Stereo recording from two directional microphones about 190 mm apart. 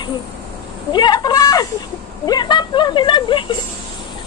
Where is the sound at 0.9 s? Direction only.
20° left (ahead or behind).